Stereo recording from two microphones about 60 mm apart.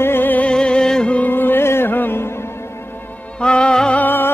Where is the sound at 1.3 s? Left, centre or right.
Left.